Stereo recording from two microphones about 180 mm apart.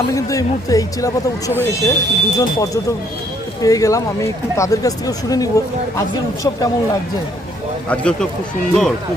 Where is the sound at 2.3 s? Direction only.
20° left (ahead or behind).